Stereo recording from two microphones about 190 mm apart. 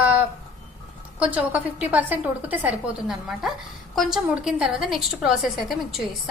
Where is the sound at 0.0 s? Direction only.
10° right (ahead or behind).